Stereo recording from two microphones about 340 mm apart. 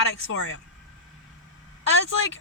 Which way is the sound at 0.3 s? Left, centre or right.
Left.